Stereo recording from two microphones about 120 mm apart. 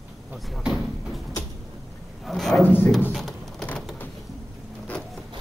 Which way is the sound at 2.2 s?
Centre (ahead or behind).